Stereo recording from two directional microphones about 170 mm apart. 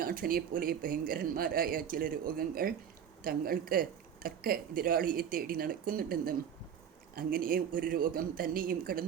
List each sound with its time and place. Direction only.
0.0 s speech: 55° right (ahead or behind)